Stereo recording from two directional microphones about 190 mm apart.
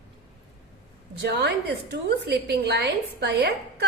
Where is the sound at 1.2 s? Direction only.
60° right (ahead or behind).